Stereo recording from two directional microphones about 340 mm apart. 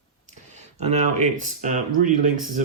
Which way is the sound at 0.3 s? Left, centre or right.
Centre.